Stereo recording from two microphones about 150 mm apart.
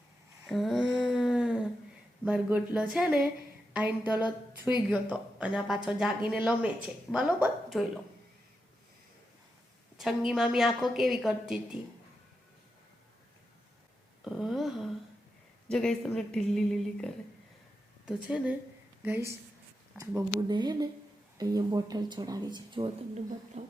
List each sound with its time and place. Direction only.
0.4 s humming: centre (ahead or behind)
2.2 s a woman's voice: 10° right (ahead or behind)
10.0 s a woman's voice: centre (ahead or behind)
14.3 s a woman's voice: centre (ahead or behind)
20.5 s speech: 30° right (ahead or behind)
23.6 s a sound: 50° right (ahead or behind)